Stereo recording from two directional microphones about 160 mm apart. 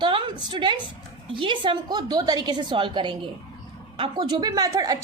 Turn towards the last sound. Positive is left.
turn(degrees=-25)  # may be behind; listen again after turning